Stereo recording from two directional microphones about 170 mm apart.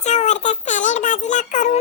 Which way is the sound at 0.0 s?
45° left (ahead or behind).